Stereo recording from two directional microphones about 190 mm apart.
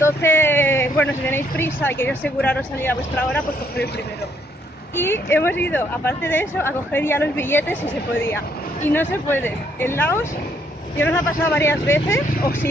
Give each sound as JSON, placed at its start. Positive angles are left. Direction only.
{"t": 0.0, "sound": "speech", "side_deg": 10}
{"t": 4.9, "sound": "speech", "side_deg": 10}